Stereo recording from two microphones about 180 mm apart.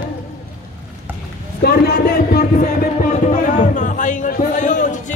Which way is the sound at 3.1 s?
45° left (ahead or behind).